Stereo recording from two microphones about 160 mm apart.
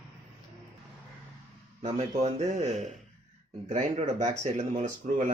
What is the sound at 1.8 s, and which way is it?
Speech, 45° right (ahead or behind).